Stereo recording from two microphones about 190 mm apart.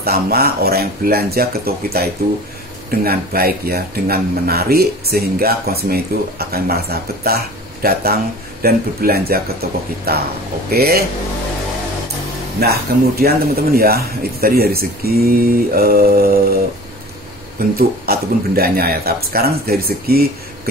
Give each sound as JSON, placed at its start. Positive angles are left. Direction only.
{"t": 0.0, "sound": "speech", "side_deg": -55}
{"t": 12.5, "sound": "speech", "side_deg": -55}
{"t": 17.6, "sound": "speech", "side_deg": -55}